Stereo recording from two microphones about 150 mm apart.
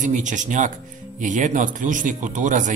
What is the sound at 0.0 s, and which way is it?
A man's voice, 55° right (ahead or behind).